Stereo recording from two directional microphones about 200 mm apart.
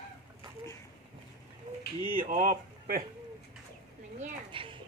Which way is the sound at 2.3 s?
45° right (ahead or behind).